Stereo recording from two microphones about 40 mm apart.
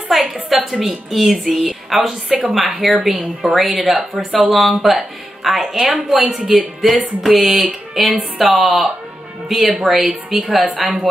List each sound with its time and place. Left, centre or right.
0.1 s a woman's voice: centre
10.0 s a woman's voice: centre
10.5 s a woman's voice: centre